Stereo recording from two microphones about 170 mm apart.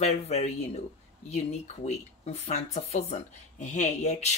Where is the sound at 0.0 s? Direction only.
40° left (ahead or behind).